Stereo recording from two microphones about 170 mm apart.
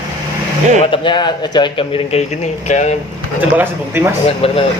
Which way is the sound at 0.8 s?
30° left (ahead or behind).